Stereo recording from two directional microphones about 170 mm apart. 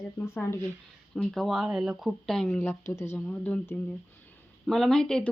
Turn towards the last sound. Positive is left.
turn(degrees=5)  # may be behind; listen again after turning